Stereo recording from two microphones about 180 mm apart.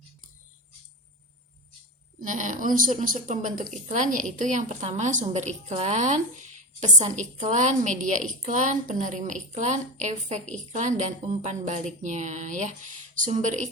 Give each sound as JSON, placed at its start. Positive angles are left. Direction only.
{"t": 2.2, "sound": "a woman's voice", "side_deg": -45}